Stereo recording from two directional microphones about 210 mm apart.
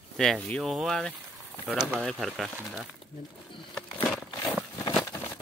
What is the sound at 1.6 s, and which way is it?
Speech, 5° right (ahead or behind).